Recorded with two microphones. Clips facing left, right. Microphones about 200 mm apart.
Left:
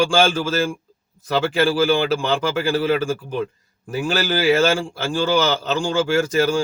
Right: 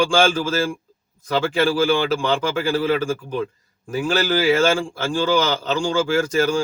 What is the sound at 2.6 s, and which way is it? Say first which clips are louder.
Speech: left 1 dB; 10° left (ahead or behind).